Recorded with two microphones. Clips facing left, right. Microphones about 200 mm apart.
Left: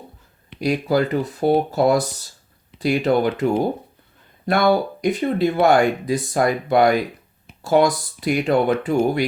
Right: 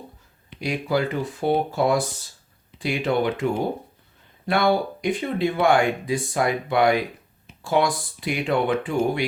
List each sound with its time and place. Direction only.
0.6 s speech: 40° left (ahead or behind)
4.4 s speech: 40° left (ahead or behind)